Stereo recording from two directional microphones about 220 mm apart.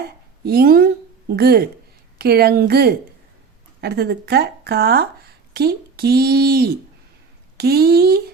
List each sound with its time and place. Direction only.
0.4 s speech: 45° right (ahead or behind)